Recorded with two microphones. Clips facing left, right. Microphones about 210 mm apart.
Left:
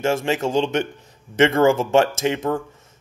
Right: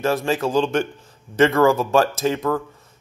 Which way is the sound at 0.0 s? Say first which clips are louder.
Even; 25° left (ahead or behind).